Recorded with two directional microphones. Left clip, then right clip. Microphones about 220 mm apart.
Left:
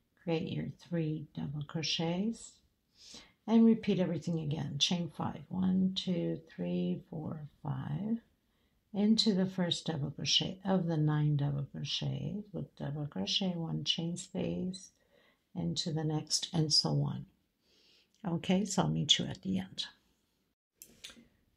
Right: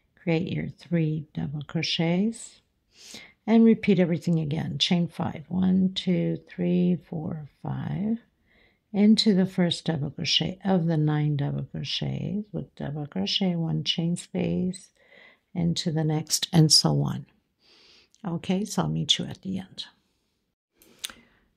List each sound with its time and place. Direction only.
0.2 s speech: 45° right (ahead or behind)
18.1 s speech: 20° right (ahead or behind)